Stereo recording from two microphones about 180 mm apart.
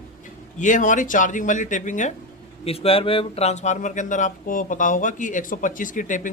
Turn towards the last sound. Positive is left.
turn(degrees=45)  # may be behind; listen again after turning